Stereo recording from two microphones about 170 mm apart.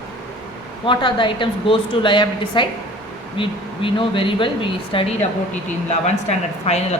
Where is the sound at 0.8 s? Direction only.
30° left (ahead or behind).